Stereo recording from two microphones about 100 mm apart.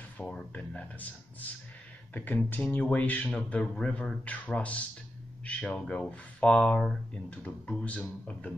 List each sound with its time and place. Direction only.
0.2 s speech: 15° left (ahead or behind)